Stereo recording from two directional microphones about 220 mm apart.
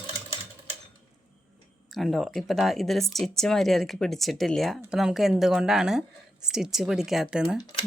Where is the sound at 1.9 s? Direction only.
Centre (ahead or behind).